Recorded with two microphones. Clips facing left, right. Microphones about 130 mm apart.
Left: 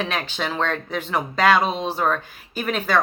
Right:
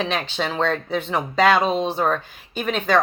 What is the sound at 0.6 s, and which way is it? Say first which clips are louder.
Speech: right 5 dB; 35° right (ahead or behind).